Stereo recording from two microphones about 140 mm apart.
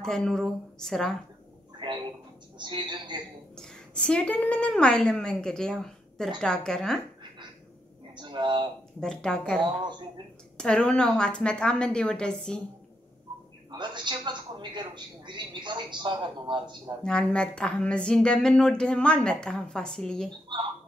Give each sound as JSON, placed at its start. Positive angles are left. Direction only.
{"t": 0.0, "sound": "a woman's voice", "side_deg": 5}
{"t": 1.8, "sound": "a sound", "side_deg": -35}
{"t": 2.6, "sound": "a woman's voice", "side_deg": -35}
{"t": 3.5, "sound": "a woman's voice", "side_deg": 5}
{"t": 8.2, "sound": "a sound", "side_deg": -35}
{"t": 9.0, "sound": "a woman's voice", "side_deg": 5}
{"t": 10.6, "sound": "a woman's voice", "side_deg": 5}
{"t": 13.7, "sound": "a man's voice", "side_deg": -35}
{"t": 17.0, "sound": "a woman's voice", "side_deg": 5}